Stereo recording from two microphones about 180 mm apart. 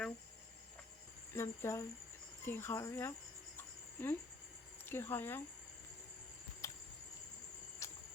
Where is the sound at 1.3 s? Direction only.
15° left (ahead or behind).